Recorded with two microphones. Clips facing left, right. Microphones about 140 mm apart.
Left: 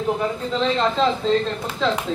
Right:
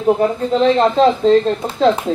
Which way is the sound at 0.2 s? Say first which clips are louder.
Right 8 dB; 40° right (ahead or behind).